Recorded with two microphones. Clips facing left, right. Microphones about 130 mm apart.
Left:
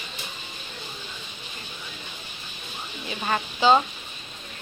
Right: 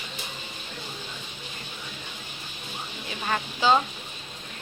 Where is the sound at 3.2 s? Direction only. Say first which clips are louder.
Left 3 dB; 15° left (ahead or behind).